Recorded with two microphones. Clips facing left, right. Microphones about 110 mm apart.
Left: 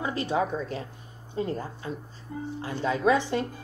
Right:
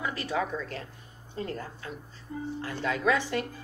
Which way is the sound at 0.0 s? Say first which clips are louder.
Left 4 dB; 25° left (ahead or behind).